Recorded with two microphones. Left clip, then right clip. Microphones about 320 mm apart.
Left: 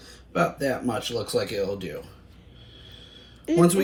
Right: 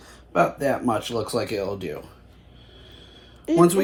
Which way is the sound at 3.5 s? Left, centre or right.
Centre.